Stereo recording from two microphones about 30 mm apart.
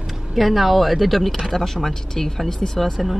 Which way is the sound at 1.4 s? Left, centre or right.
Centre.